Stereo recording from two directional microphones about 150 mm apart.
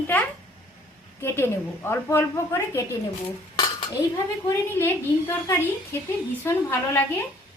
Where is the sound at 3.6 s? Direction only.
30° left (ahead or behind).